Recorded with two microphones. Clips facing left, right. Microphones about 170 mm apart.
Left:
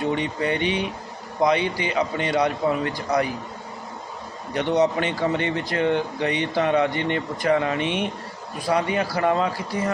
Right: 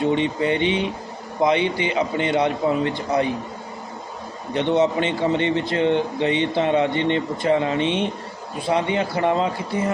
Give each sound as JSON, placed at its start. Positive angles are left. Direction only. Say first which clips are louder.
{"t": 0.0, "sound": "a man's voice", "louder": "right 4 dB", "side_deg": -25}
{"t": 4.5, "sound": "a man's voice", "louder": "right 2 dB", "side_deg": -25}